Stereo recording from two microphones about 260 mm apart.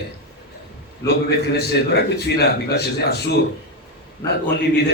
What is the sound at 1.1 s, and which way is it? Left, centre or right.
A man's voice, left.